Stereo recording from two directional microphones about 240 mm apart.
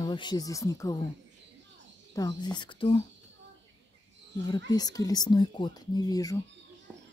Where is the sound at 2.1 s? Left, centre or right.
Centre.